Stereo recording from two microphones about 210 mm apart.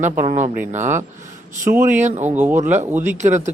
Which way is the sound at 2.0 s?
35° right (ahead or behind).